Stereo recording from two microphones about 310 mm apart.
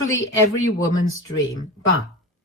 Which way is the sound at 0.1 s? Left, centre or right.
Left.